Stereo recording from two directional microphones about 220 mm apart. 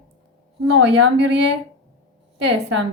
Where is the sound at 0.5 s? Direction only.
55° right (ahead or behind).